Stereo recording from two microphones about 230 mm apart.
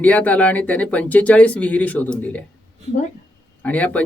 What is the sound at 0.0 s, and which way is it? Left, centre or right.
Speech, centre.